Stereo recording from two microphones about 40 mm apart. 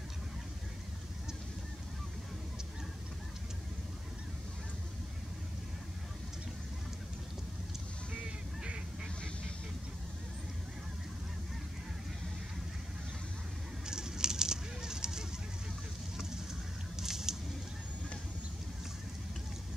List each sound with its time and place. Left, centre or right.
8.2 s music: right
13.8 s goose: centre
16.9 s a sound: centre